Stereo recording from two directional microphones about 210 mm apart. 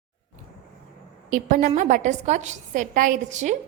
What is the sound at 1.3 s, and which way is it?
A woman's voice, 35° right (ahead or behind).